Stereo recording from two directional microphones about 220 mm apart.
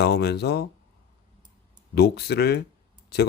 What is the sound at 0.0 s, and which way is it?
Speech, 50° left (ahead or behind).